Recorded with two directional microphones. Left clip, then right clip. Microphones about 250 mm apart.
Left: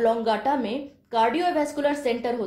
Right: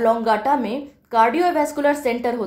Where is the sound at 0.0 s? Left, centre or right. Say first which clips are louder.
Right 4 dB; right.